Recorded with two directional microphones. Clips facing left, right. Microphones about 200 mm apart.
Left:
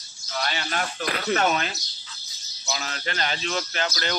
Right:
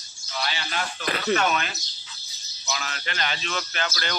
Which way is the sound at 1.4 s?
30° left (ahead or behind).